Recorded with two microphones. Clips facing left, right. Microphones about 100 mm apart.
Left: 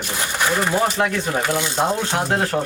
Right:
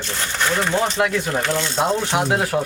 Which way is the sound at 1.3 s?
10° left (ahead or behind).